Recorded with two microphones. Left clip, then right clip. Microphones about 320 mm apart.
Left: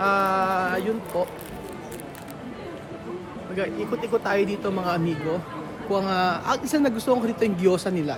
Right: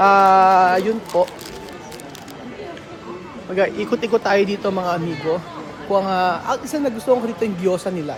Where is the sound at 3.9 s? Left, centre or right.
Right.